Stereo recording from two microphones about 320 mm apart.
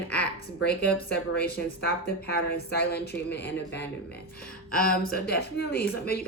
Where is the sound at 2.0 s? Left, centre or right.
Left.